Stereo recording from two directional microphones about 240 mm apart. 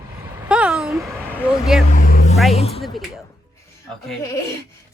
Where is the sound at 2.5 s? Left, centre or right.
Left.